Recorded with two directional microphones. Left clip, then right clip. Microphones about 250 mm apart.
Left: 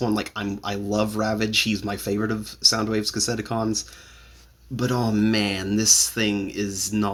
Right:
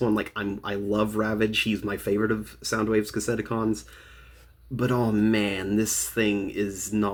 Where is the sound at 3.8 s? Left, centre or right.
Centre.